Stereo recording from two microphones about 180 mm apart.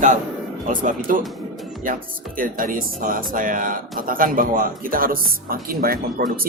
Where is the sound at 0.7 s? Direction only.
50° right (ahead or behind).